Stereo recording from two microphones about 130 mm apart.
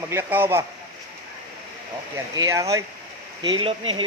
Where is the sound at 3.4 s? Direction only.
40° right (ahead or behind).